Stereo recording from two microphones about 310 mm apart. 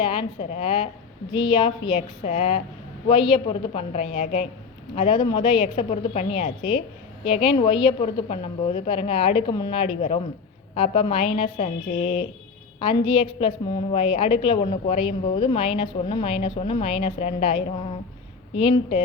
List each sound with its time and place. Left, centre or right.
0.0 s a woman's voice: centre